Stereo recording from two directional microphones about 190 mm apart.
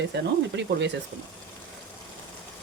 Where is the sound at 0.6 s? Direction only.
70° right (ahead or behind).